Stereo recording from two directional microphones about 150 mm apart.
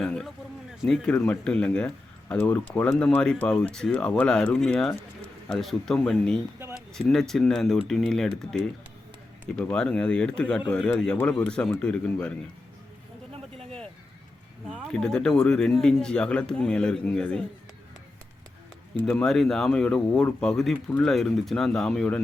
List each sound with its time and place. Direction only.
0.0 s speech: 5° left (ahead or behind)
9.6 s speech: 5° left (ahead or behind)
13.3 s a sound: 40° right (ahead or behind)
14.7 s speech: 5° left (ahead or behind)
19.0 s speech: 5° left (ahead or behind)